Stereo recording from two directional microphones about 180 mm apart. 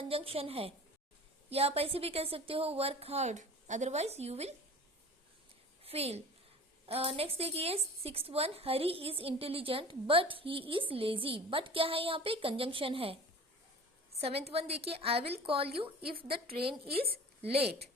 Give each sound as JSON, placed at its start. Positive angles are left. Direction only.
{"t": 0.0, "sound": "a woman's voice", "side_deg": -30}
{"t": 5.8, "sound": "a woman's voice", "side_deg": -35}
{"t": 14.2, "sound": "a woman's voice", "side_deg": -35}